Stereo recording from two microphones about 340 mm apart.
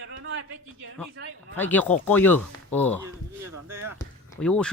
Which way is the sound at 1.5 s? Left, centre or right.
Centre.